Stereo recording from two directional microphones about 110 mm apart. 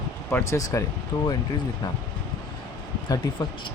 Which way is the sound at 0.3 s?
25° left (ahead or behind).